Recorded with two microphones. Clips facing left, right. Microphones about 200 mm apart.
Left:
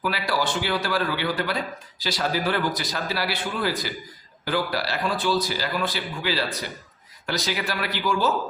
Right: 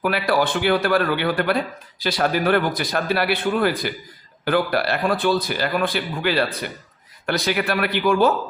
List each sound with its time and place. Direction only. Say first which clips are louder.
0.0 s a man's voice: right 6 dB; 55° right (ahead or behind)